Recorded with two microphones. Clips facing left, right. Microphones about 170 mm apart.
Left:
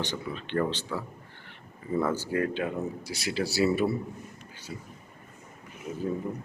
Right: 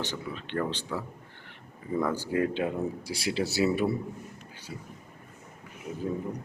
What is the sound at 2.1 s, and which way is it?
Speech, 15° right (ahead or behind).